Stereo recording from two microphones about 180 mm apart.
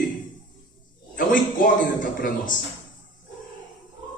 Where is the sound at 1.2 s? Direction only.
50° left (ahead or behind).